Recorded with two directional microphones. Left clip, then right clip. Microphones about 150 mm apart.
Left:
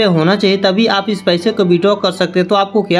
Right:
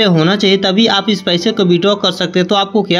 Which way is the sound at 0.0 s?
30° right (ahead or behind).